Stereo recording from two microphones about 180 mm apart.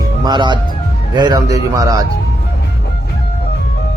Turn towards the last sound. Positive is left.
turn(degrees=-20)  # may be behind; listen again after turning